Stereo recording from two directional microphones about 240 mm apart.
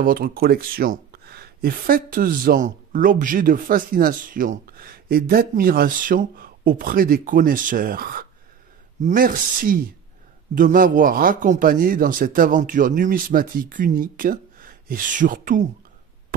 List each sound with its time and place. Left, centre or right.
0.0 s speech: right